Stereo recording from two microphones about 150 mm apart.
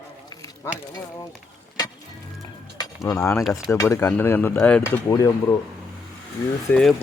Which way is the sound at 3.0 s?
20° left (ahead or behind).